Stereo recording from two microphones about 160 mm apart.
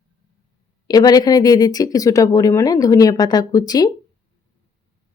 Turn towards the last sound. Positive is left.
turn(degrees=25)  # may be behind; listen again after turning